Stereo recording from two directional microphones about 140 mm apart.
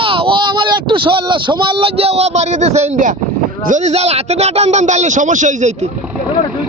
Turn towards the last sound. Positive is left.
turn(degrees=-60)  # may be behind; listen again after turning